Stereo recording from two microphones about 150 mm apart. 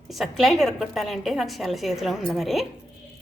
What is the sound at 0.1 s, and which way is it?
A woman's voice, centre (ahead or behind).